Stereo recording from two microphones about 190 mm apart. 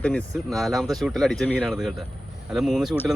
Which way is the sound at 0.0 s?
5° left (ahead or behind).